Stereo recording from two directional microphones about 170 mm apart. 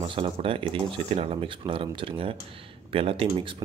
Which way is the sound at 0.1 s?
30° right (ahead or behind).